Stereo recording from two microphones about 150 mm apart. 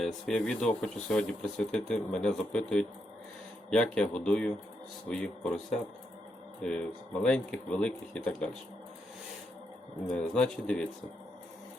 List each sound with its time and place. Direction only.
0.0 s speech: 5° left (ahead or behind)
6.6 s speech: 5° left (ahead or behind)
10.1 s speech: 5° left (ahead or behind)